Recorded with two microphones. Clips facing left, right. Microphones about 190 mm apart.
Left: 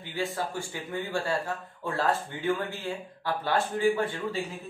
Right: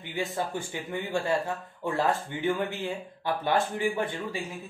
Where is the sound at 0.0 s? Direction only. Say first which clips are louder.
Even; 20° right (ahead or behind).